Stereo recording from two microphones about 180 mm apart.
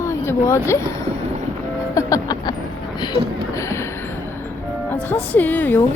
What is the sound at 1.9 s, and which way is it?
Music, 20° left (ahead or behind).